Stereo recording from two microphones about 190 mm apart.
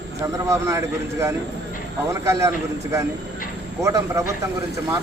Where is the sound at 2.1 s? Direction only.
15° right (ahead or behind).